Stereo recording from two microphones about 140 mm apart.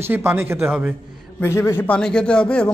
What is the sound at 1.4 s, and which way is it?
A man's voice, 20° left (ahead or behind).